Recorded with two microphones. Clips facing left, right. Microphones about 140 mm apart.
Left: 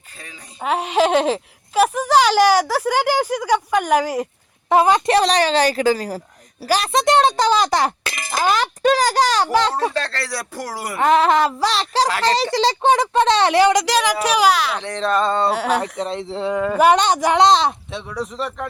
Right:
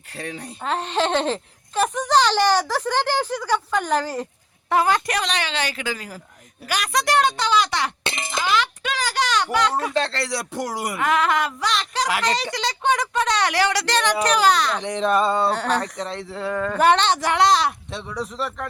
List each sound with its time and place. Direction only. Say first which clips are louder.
0.2 s speech: right 10 dB; 65° right (ahead or behind)
0.6 s a woman's voice: left 5 dB; 10° left (ahead or behind)
5.1 s a woman's voice: left 10 dB; 35° left (ahead or behind)
8.0 s clang: right 1 dB; 25° right (ahead or behind)
8.3 s a woman's voice: left 4 dB; 45° left (ahead or behind)
9.9 s speech: right 1 dB; 25° right (ahead or behind)
10.9 s a woman's voice: left 7 dB; 30° left (ahead or behind)
13.8 s a woman's voice: left 2 dB; 10° left (ahead or behind)
14.8 s speech: even; 15° right (ahead or behind)
15.4 s a woman's voice: left 3 dB; 10° left (ahead or behind)
16.0 s speech: left 5 dB; 20° left (ahead or behind)
16.6 s a woman's voice: left 3 dB; 10° left (ahead or behind)
17.9 s speech: left 2 dB; centre (ahead or behind)